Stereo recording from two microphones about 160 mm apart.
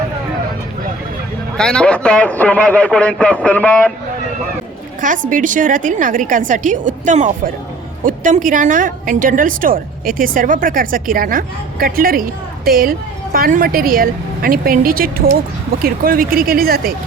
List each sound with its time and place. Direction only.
1.5 s a man's voice: 5° left (ahead or behind)
4.9 s a woman's voice: 55° right (ahead or behind)